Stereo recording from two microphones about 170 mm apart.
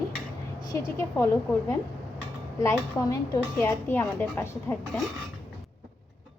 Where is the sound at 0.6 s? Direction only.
20° left (ahead or behind).